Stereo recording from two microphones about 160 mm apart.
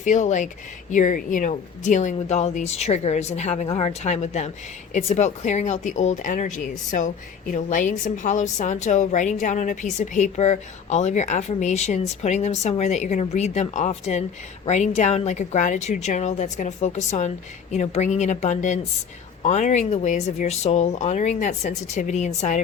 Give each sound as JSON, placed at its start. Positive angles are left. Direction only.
{"t": 0.0, "sound": "a woman's voice", "side_deg": 50}